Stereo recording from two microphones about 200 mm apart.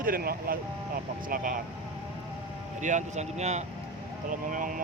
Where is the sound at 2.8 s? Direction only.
35° right (ahead or behind).